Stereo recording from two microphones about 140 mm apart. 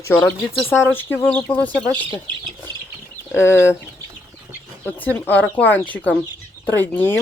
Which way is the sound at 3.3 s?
20° left (ahead or behind).